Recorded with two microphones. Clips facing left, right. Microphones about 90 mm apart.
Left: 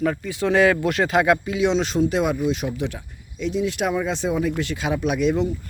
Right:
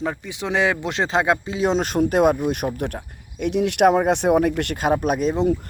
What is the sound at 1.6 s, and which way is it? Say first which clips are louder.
Speech: right 1 dB; 50° right (ahead or behind).